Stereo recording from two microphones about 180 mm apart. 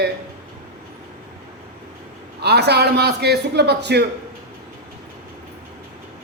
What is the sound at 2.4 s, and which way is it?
A man's voice, 65° right (ahead or behind).